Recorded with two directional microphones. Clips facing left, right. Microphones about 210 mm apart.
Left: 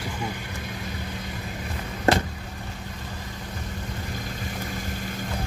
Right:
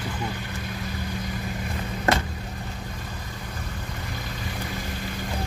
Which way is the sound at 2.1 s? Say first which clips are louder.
Left 3 dB; 30° left (ahead or behind).